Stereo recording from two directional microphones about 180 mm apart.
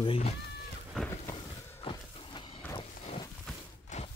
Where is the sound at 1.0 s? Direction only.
5° left (ahead or behind).